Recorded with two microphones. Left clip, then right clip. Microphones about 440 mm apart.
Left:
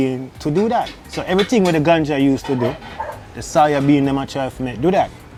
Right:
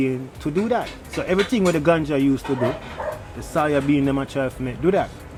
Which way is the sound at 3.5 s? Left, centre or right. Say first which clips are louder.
Left 6 dB; left.